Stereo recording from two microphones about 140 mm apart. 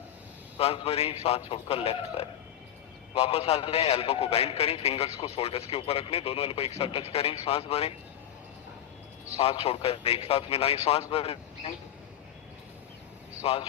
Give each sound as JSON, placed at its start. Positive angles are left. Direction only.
{"t": 0.6, "sound": "a man's voice", "side_deg": 45}
{"t": 9.4, "sound": "a man's voice", "side_deg": 45}
{"t": 13.4, "sound": "speech", "side_deg": 45}